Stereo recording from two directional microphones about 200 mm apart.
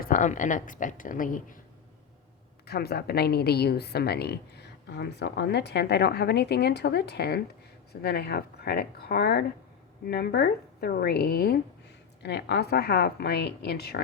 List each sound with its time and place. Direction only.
0.0 s a woman's voice: 40° left (ahead or behind)
2.6 s a woman's voice: 50° left (ahead or behind)